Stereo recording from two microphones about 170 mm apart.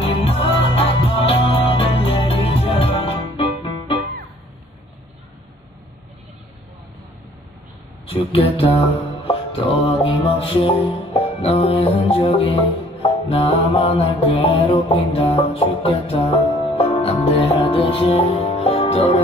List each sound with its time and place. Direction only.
0.0 s music: 35° left (ahead or behind)
8.1 s music: 35° left (ahead or behind)